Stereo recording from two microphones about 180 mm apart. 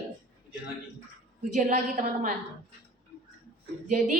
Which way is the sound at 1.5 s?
45° right (ahead or behind).